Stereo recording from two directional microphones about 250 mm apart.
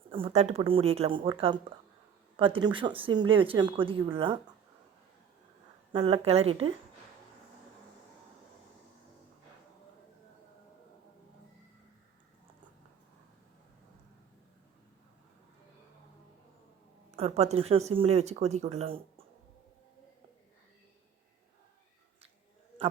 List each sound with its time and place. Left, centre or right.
0.1 s speech: right
5.9 s speech: right
17.1 s speech: right